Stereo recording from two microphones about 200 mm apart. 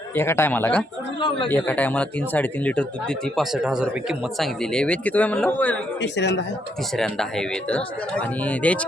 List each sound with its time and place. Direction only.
0.1 s speech: 10° left (ahead or behind)
6.0 s speech: 60° left (ahead or behind)
6.9 s speech: 5° left (ahead or behind)